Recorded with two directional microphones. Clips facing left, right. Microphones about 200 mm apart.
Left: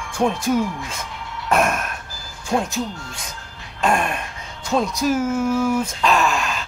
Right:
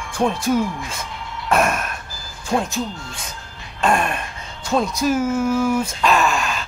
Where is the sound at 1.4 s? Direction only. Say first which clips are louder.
Even; centre (ahead or behind).